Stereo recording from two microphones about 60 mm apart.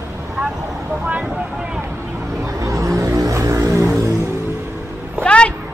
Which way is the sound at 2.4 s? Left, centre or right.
Right.